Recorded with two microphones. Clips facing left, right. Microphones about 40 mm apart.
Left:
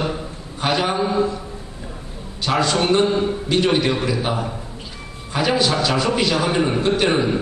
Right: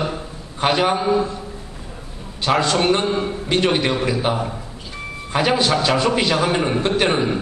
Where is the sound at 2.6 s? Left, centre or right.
Centre.